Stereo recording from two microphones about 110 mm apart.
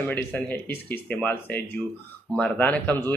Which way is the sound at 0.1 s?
15° left (ahead or behind).